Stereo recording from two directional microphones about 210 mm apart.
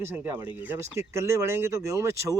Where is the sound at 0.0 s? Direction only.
10° right (ahead or behind).